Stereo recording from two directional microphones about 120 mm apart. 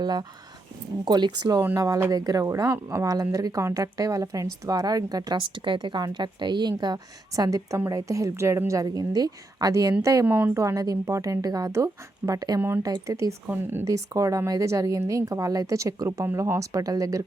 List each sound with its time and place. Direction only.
0.0 s a woman's voice: 35° right (ahead or behind)
10.2 s a woman's voice: 15° right (ahead or behind); by 12.5 s 30° right (ahead or behind)
12.5 s a woman's voice: 20° right (ahead or behind)